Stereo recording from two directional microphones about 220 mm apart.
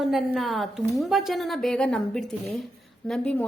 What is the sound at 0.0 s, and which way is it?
A woman's voice, centre (ahead or behind).